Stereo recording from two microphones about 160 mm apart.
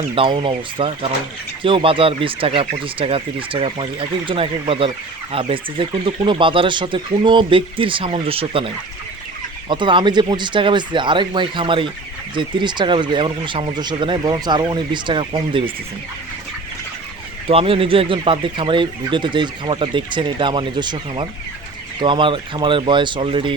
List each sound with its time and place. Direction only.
0.2 s speech: 30° right (ahead or behind)
17.5 s speech: 35° right (ahead or behind)